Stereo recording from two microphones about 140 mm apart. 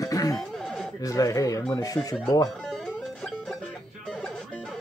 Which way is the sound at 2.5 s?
Centre (ahead or behind).